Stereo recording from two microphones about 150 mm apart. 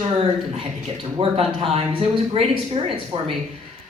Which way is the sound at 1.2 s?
40° right (ahead or behind).